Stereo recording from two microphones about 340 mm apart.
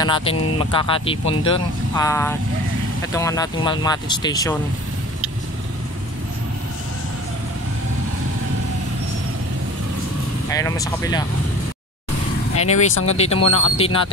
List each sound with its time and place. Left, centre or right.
0.0 s speech: centre
10.5 s speech: centre
12.5 s speech: left
13.0 s speech: centre
13.4 s speech: left
13.7 s speech: centre